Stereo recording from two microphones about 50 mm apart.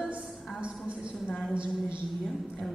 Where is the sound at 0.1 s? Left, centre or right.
Right.